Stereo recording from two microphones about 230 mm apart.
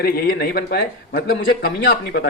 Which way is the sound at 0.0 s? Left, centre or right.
Left.